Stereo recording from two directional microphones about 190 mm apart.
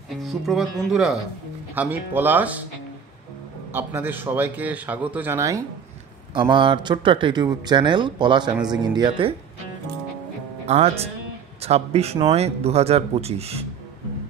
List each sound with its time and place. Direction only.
0.1 s a man's voice: centre (ahead or behind)
3.7 s a man's voice: 10° right (ahead or behind)
6.5 s speech: 25° right (ahead or behind)
10.7 s a man's voice: 35° right (ahead or behind)